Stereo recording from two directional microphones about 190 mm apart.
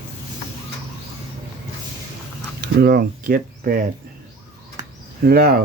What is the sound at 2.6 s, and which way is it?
Speech, 55° right (ahead or behind).